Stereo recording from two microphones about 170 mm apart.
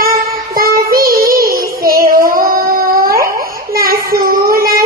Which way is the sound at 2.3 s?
60° right (ahead or behind).